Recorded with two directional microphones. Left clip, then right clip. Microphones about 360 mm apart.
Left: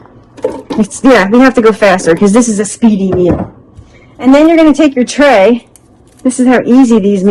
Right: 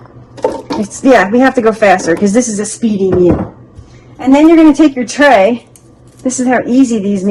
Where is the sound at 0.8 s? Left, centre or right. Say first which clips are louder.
Left 1 dB; left.